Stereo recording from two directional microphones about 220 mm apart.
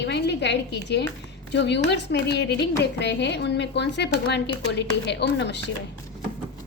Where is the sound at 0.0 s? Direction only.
50° left (ahead or behind).